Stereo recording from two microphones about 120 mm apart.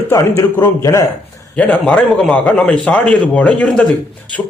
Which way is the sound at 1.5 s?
10° left (ahead or behind).